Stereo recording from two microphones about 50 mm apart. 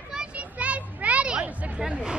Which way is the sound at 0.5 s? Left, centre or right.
Right.